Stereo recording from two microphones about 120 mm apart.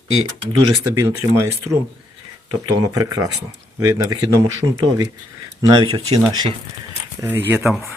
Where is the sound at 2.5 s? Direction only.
30° right (ahead or behind).